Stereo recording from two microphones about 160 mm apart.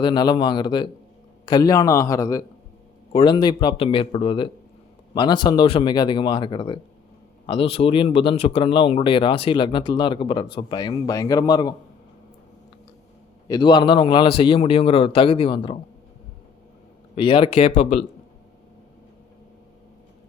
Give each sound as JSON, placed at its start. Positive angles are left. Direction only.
{"t": 0.0, "sound": "speech", "side_deg": 30}
{"t": 3.1, "sound": "speech", "side_deg": 30}
{"t": 13.5, "sound": "speech", "side_deg": 30}
{"t": 17.2, "sound": "speech", "side_deg": 35}